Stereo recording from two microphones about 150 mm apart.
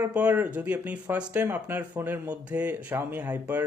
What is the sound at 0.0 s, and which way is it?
Speech, 10° right (ahead or behind).